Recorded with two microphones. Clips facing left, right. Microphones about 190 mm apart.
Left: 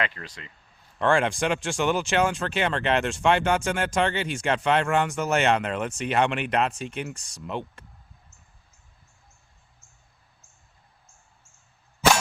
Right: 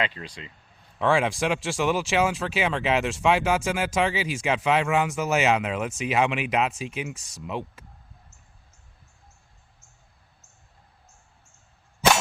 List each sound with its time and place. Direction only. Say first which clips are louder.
0.0 s speech: right 1 dB; 15° right (ahead or behind)
0.9 s speech: even; centre (ahead or behind)